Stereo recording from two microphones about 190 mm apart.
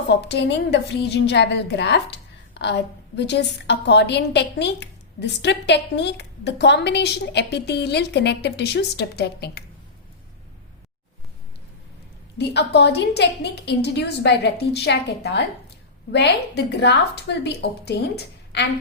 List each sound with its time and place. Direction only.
0.1 s a woman's voice: 65° left (ahead or behind)
3.2 s a woman's voice: 65° left (ahead or behind)
12.4 s a woman's voice: 65° left (ahead or behind)